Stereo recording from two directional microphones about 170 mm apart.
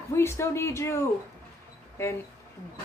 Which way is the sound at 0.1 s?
15° left (ahead or behind).